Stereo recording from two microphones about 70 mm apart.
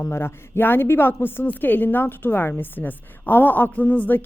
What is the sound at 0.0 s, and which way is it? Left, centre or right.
A woman's voice, left.